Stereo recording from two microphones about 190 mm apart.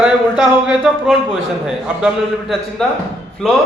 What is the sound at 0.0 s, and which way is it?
A man's voice, 5° right (ahead or behind).